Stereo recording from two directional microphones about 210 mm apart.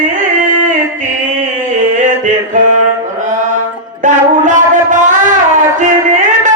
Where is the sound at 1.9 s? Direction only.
35° right (ahead or behind).